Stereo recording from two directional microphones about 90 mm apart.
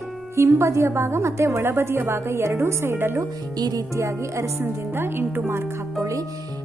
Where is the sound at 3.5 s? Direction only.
50° right (ahead or behind).